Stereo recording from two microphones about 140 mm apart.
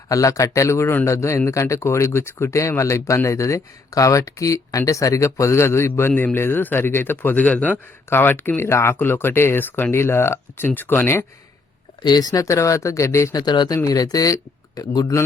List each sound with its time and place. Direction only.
0.1 s speech: 25° left (ahead or behind)
12.0 s speech: 30° left (ahead or behind)